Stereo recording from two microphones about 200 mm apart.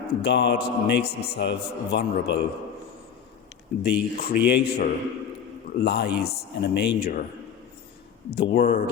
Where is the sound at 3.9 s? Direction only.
50° left (ahead or behind).